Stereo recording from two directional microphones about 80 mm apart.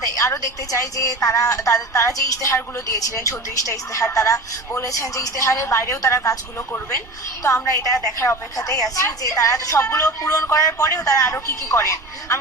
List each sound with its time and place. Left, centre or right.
0.0 s a woman's voice: left
7.4 s a woman's voice: left